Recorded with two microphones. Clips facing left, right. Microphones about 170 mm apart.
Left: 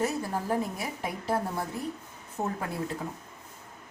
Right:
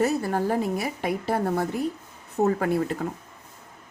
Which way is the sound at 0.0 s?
75° right (ahead or behind).